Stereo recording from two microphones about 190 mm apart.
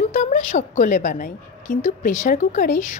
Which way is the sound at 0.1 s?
40° left (ahead or behind).